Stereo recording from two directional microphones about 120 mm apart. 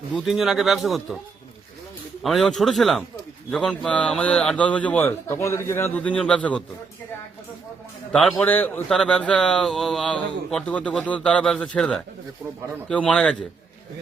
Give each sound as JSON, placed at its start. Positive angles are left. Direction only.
{"t": 0.3, "sound": "speech", "side_deg": 0}
{"t": 2.2, "sound": "a man's voice", "side_deg": 0}
{"t": 5.3, "sound": "a man's voice", "side_deg": 20}
{"t": 6.0, "sound": "a man's voice", "side_deg": 10}
{"t": 8.1, "sound": "speech", "side_deg": 5}
{"t": 8.4, "sound": "a man's voice", "side_deg": 15}
{"t": 8.9, "sound": "a man's voice", "side_deg": 5}